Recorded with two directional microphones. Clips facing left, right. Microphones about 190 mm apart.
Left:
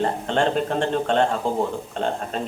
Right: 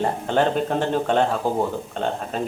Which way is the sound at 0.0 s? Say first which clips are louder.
Right 1 dB; 5° right (ahead or behind).